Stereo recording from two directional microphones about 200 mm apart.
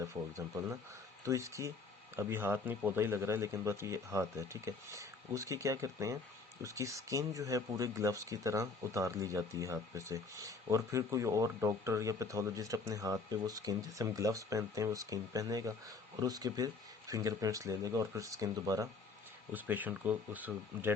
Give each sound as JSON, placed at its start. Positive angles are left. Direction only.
{"t": 0.0, "sound": "speech", "side_deg": -15}